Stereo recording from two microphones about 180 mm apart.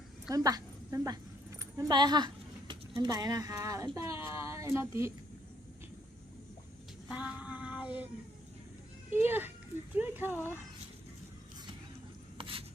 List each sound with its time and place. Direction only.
0.3 s a woman's voice: 20° right (ahead or behind)
7.1 s music: 5° right (ahead or behind)
9.1 s a child's voice: 10° right (ahead or behind)
12.4 s a sound: 30° right (ahead or behind)